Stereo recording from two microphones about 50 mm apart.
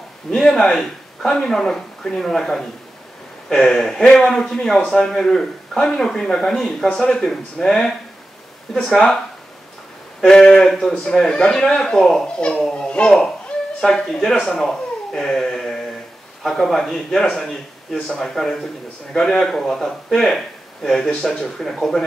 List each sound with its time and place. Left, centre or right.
0.3 s speech: centre
10.2 s speech: centre
12.4 s speech: centre